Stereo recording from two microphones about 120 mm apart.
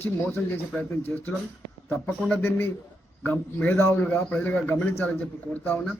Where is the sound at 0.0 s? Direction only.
15° left (ahead or behind).